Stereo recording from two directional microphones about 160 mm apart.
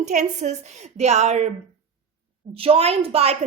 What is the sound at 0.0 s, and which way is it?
A woman's voice, 50° right (ahead or behind).